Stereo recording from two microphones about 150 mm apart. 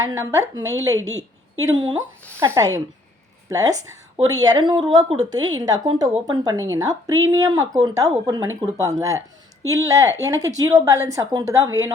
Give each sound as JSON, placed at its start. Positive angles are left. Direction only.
{"t": 0.0, "sound": "speech", "side_deg": -20}